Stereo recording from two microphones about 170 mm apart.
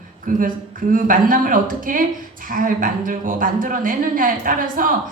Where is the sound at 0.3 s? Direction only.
50° right (ahead or behind).